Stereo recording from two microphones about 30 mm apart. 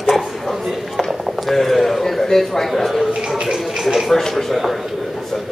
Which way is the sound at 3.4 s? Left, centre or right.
Centre.